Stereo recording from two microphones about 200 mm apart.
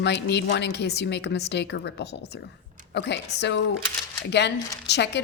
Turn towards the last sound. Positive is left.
turn(degrees=60)  # may be behind; listen again after turning